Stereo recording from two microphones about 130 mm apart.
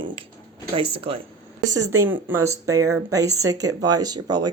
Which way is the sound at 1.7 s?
15° right (ahead or behind).